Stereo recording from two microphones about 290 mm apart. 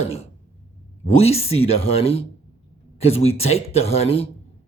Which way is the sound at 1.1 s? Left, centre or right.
Left.